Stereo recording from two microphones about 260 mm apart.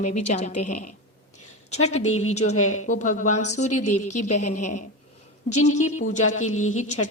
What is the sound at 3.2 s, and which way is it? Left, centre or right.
A woman's voice, left.